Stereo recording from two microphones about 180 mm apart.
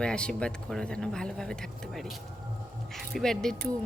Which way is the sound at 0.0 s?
5° left (ahead or behind).